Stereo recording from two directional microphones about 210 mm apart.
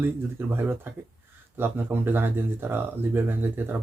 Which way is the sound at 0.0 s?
10° right (ahead or behind).